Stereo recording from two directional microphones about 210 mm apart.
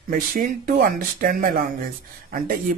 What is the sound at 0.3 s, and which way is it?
Speech, 45° right (ahead or behind).